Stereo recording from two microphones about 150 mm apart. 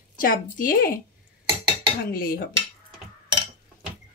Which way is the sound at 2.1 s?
80° left.